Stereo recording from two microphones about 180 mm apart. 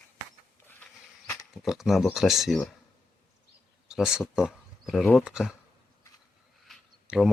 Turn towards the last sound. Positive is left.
turn(degrees=0)  # may be behind; listen again after turning